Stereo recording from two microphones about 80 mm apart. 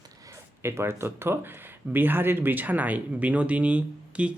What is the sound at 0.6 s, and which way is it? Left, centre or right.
Speech, right.